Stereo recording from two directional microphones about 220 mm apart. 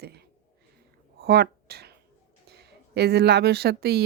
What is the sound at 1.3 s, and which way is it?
A woman's voice, 45° right (ahead or behind).